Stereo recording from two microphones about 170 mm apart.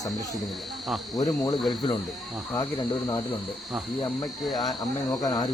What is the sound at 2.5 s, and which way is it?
Cricket, 20° left (ahead or behind).